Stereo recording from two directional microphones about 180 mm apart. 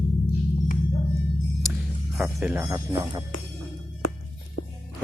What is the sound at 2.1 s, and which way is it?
Music, 5° right (ahead or behind).